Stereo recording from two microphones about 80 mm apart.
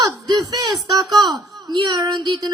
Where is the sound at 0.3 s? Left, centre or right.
Right.